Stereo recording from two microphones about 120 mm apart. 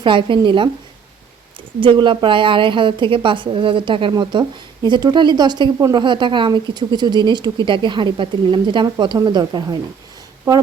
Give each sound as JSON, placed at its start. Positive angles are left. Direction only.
{"t": 0.0, "sound": "a woman's voice", "side_deg": -45}
{"t": 1.8, "sound": "a woman's voice", "side_deg": -45}